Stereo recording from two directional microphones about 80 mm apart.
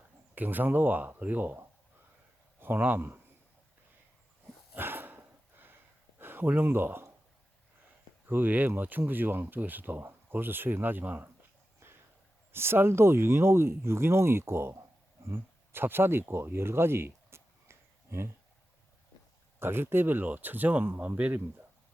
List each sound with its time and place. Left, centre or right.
0.3 s speech: right
4.7 s dog: right
6.1 s speech: right
8.3 s speech: right
12.5 s speech: right
15.3 s a sound: right
19.5 s speech: right